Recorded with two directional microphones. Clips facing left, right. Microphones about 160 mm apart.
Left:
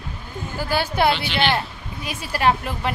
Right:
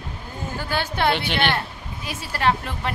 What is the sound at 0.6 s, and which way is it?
A woman's voice, 10° left (ahead or behind).